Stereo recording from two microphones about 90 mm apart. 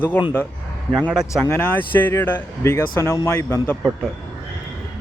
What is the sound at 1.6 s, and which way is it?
Speech, 20° left (ahead or behind).